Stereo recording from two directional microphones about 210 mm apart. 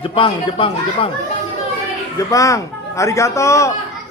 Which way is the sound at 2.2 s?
15° left (ahead or behind).